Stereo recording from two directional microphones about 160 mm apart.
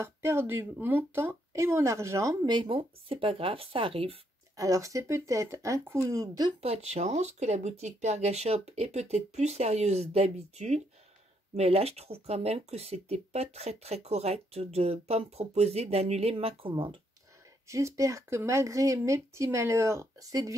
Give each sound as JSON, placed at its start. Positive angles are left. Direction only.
{"t": 0.0, "sound": "speech", "side_deg": -15}
{"t": 4.6, "sound": "speech", "side_deg": -20}
{"t": 6.6, "sound": "speech", "side_deg": -40}
{"t": 17.6, "sound": "speech", "side_deg": -20}